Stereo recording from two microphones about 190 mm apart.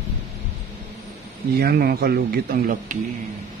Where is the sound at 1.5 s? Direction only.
55° right (ahead or behind).